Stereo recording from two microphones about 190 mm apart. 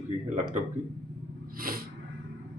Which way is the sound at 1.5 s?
50° right (ahead or behind).